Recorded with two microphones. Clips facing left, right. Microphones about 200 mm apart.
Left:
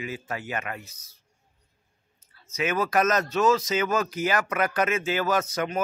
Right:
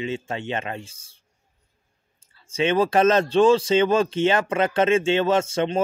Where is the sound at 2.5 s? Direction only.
30° right (ahead or behind).